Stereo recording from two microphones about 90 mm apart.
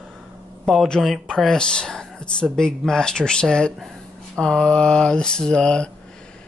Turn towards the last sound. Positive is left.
turn(degrees=10)  # may be behind; listen again after turning